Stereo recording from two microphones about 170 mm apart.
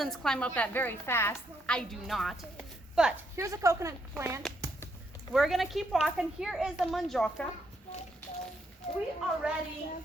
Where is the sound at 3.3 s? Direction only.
20° right (ahead or behind).